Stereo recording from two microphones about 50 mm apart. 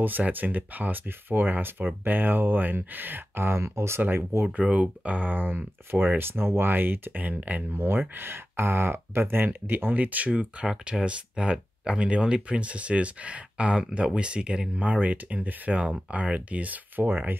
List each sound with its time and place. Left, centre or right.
0.2 s speech: right
3.6 s speech: right
4.0 s speech: right
4.5 s speech: right
6.7 s speech: right
7.7 s speech: right
10.6 s speech: centre
14.8 s speech: right